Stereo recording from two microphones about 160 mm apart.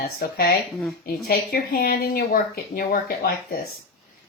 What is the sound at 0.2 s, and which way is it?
Speech, 75° left (ahead or behind).